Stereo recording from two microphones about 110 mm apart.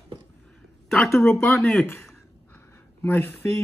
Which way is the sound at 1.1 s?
25° left (ahead or behind).